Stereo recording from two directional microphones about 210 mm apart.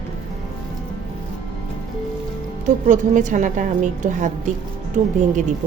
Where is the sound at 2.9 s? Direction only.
35° right (ahead or behind).